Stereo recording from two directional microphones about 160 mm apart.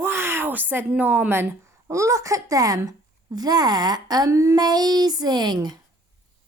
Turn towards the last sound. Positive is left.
turn(degrees=-25)  # may be behind; listen again after turning